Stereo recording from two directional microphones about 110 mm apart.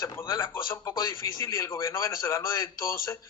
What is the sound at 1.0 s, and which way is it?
A man's voice, 30° left (ahead or behind).